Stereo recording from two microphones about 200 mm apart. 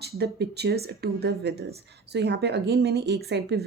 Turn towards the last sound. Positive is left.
turn(degrees=-55)  # may be behind; listen again after turning